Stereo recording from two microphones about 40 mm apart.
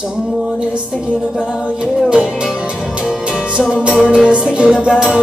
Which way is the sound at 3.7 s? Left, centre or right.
Right.